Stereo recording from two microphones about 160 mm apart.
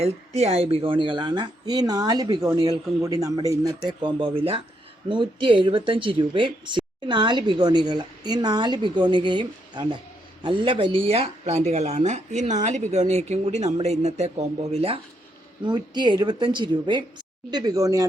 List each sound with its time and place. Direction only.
0.0 s speech: 40° right (ahead or behind)
15.6 s speech: 30° right (ahead or behind)